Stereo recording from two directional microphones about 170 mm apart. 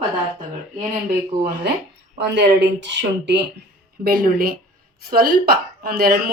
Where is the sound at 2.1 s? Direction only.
90° right.